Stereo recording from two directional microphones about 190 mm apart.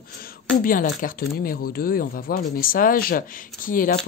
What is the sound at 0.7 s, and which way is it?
A woman's voice, 45° left (ahead or behind).